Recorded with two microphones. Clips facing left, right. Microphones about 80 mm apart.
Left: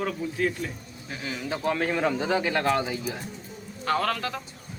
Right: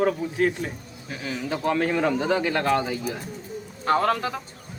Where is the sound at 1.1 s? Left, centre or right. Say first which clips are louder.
Right 3 dB; centre.